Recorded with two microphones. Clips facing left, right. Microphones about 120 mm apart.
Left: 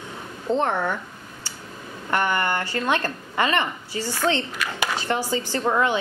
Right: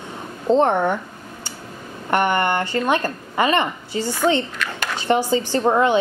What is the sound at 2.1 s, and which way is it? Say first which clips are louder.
Speech: right 4 dB; 20° right (ahead or behind).